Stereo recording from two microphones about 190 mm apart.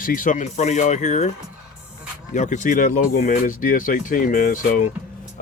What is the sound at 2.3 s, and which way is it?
Speech, 40° left (ahead or behind).